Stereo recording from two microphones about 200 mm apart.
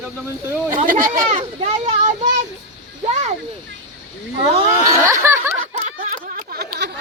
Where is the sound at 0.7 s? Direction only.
45° right (ahead or behind).